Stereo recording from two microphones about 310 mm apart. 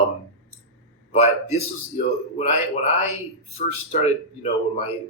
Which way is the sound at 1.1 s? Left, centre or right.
Left.